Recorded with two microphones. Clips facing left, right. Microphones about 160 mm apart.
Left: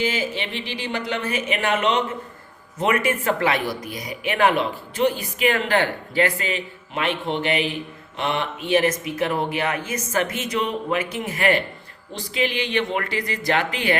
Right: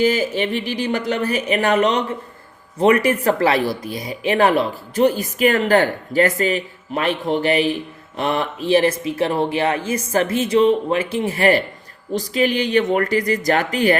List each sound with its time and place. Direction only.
0.0 s speech: 40° right (ahead or behind)